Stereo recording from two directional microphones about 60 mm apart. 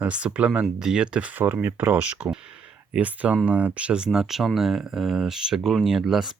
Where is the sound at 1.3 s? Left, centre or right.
Right.